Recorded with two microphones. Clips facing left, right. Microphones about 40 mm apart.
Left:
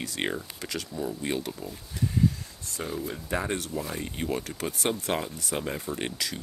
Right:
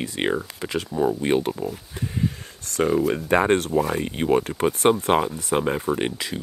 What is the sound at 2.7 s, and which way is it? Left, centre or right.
Speech, right.